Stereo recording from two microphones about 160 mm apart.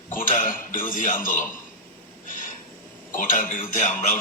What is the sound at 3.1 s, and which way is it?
A man's voice, 60° left (ahead or behind).